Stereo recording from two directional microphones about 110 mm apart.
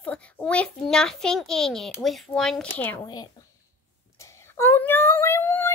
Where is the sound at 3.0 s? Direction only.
40° left (ahead or behind).